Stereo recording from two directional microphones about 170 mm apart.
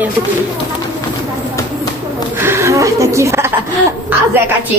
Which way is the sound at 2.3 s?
15° right (ahead or behind).